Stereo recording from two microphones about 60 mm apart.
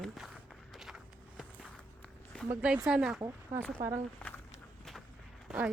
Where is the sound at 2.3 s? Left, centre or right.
Centre.